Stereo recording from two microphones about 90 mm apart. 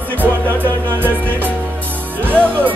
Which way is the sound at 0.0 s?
20° right (ahead or behind).